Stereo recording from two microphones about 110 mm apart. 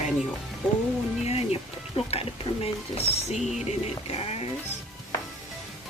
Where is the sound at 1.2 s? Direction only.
65° left (ahead or behind).